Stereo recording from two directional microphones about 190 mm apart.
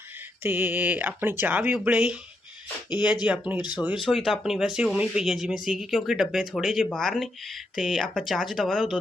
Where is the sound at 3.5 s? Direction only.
20° left (ahead or behind).